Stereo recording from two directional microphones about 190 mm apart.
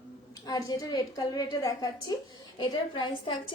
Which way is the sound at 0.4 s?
20° left (ahead or behind).